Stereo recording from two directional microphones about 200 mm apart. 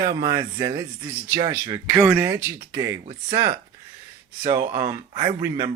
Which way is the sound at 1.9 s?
5° right (ahead or behind).